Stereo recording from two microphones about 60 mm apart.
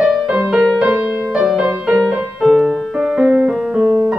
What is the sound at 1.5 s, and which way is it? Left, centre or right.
Music, centre.